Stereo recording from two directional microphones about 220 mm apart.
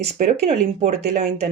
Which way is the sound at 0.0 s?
30° right (ahead or behind).